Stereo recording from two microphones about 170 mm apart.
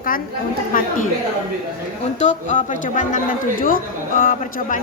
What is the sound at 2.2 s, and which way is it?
Speech, 45° left (ahead or behind).